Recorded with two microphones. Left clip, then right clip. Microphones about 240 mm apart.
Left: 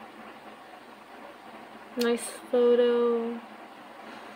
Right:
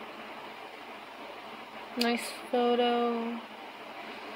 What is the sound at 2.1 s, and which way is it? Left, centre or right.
Speech, centre.